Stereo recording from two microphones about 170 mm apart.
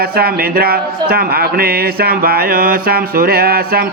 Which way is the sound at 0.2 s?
65° right (ahead or behind).